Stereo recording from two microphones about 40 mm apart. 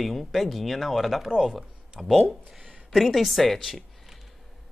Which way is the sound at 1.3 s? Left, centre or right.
Centre.